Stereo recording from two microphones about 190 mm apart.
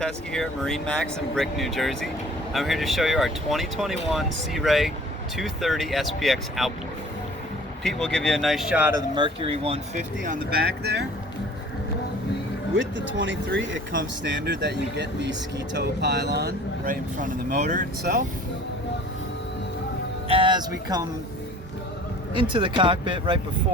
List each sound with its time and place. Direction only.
0.0 s speech: 5° left (ahead or behind)
7.9 s speech: 5° left (ahead or behind)
9.1 s speech: 25° right (ahead or behind)
10.2 s speech: 60° right (ahead or behind)
13.1 s speech: 75° right (ahead or behind); by 18.3 s 50° right (ahead or behind)
20.2 s speech: 25° right (ahead or behind)
22.4 s speech: 25° right (ahead or behind)